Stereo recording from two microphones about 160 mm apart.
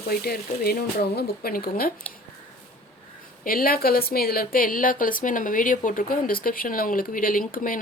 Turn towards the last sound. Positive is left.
turn(degrees=60)  # may be behind; listen again after turning